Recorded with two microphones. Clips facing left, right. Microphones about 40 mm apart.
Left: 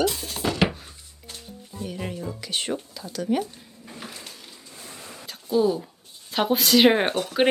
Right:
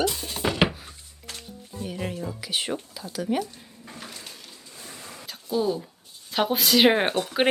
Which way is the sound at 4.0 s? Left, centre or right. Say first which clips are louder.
Left 2 dB; centre.